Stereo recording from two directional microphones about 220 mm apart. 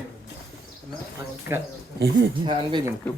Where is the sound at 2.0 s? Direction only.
45° right (ahead or behind).